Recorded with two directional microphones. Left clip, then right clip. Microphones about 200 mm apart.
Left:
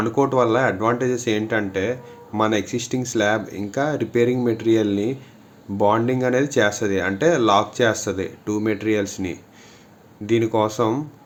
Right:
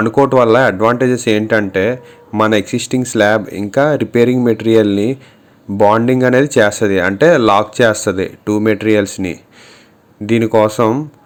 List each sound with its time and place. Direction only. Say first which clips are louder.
0.0 s speech: right 8 dB; 45° right (ahead or behind)